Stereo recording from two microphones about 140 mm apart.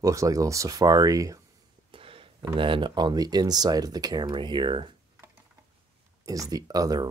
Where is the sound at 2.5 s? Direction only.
35° right (ahead or behind).